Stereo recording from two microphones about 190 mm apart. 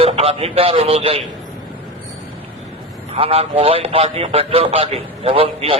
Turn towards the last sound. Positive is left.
turn(degrees=-30)  # may be behind; listen again after turning